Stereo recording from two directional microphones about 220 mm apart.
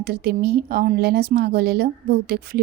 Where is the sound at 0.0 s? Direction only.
45° right (ahead or behind).